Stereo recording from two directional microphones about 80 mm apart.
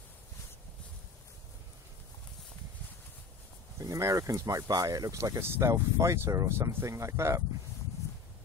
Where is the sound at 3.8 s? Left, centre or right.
Right.